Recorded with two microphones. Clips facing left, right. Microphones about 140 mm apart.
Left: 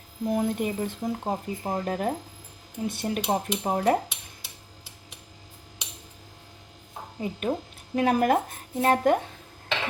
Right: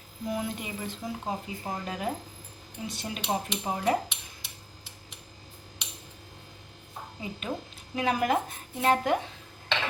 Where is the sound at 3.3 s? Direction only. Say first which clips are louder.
Left 2 dB; 50° left (ahead or behind).